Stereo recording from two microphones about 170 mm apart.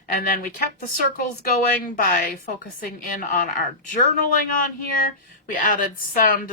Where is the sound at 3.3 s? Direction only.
55° left (ahead or behind).